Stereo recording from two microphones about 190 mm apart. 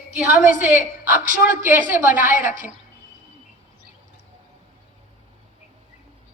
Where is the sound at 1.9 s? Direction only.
45° left (ahead or behind).